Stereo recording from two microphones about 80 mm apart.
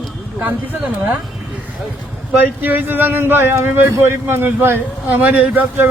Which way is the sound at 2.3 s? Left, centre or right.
Right.